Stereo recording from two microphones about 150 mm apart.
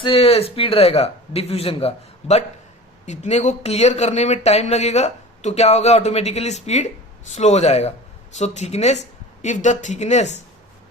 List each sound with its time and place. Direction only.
0.0 s a man's voice: 40° left (ahead or behind)